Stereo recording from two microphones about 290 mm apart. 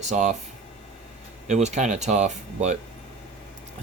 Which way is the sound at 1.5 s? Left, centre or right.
Right.